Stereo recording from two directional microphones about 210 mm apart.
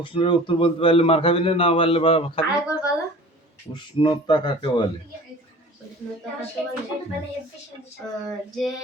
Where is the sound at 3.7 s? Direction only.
20° left (ahead or behind).